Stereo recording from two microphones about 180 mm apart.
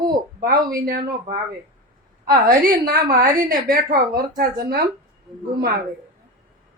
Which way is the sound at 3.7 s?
55° right (ahead or behind).